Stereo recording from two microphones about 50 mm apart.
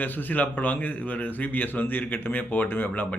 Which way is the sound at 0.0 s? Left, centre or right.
Left.